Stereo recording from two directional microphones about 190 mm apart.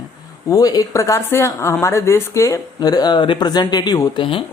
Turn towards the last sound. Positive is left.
turn(degrees=25)  # may be behind; listen again after turning